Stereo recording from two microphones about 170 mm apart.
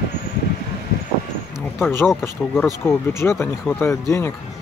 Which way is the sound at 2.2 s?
15° left (ahead or behind).